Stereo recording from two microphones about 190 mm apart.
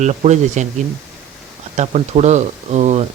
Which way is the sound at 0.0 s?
40° right (ahead or behind).